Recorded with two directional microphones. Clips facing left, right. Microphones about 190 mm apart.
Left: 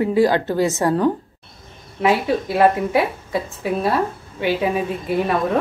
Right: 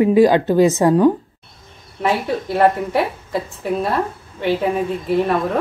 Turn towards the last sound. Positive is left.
turn(degrees=0)  # may be behind; listen again after turning